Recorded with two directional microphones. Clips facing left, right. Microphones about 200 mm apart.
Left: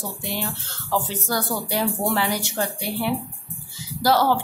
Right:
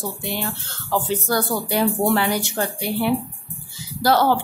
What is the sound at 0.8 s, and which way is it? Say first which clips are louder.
Speech: right 3 dB; 55° right (ahead or behind).